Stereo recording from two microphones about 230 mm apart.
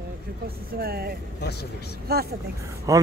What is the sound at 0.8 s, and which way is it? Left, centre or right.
Speech, right.